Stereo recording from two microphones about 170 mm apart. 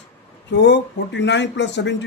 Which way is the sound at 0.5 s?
90° left.